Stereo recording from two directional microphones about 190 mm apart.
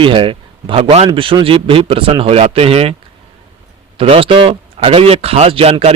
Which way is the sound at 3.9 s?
30° right (ahead or behind).